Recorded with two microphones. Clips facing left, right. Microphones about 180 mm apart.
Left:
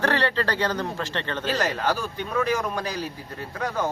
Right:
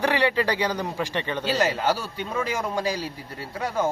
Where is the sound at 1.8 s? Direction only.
25° right (ahead or behind).